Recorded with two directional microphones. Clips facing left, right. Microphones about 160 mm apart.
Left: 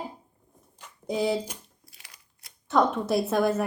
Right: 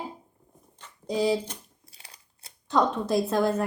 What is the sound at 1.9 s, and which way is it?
Crumpling, 30° right (ahead or behind).